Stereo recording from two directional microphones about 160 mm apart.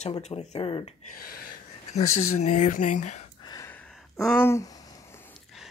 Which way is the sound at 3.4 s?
25° left (ahead or behind).